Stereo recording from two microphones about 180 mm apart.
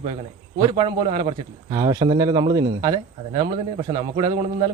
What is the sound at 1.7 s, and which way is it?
Speech, 20° right (ahead or behind).